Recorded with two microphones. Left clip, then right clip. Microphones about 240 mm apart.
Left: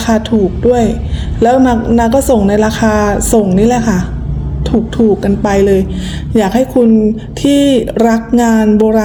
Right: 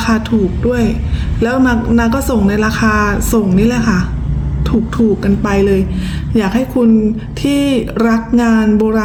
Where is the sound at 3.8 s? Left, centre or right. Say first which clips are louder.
Left 1 dB; right.